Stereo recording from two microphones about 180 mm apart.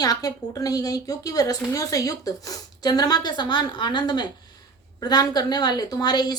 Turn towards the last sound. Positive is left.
turn(degrees=20)  # may be behind; listen again after turning